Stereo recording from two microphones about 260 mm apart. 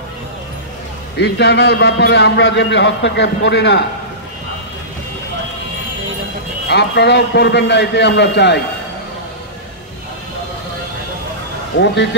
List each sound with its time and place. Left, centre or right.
1.1 s a man's voice: left
6.7 s a man's voice: left
11.8 s speech: left